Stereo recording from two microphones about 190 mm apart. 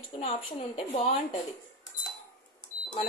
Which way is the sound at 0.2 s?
30° left (ahead or behind).